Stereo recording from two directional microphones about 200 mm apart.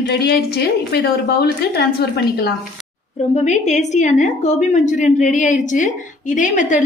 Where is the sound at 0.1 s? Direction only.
55° left (ahead or behind).